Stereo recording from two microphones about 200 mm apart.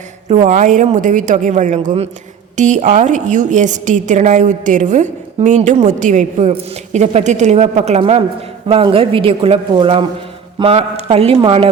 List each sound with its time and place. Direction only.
0.3 s a woman's voice: 35° right (ahead or behind)